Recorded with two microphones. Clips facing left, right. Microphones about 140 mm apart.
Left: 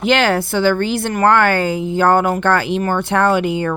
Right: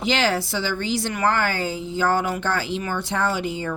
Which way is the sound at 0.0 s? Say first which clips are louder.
Left 6 dB; 60° left (ahead or behind).